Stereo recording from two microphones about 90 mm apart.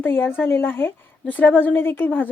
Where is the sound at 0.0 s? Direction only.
25° left (ahead or behind).